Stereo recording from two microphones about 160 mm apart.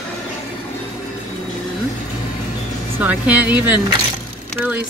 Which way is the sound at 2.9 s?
10° right (ahead or behind).